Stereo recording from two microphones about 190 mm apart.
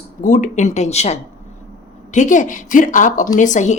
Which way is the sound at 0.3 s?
40° left (ahead or behind).